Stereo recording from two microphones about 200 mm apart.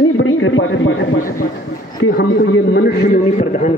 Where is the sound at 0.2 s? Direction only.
80° left.